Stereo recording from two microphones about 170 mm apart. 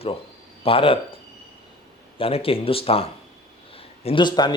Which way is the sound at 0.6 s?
35° left (ahead or behind).